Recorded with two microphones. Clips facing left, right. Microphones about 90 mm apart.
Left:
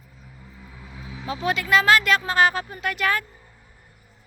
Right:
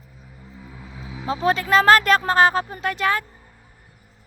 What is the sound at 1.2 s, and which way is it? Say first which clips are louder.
Speech: right 5 dB; 35° right (ahead or behind).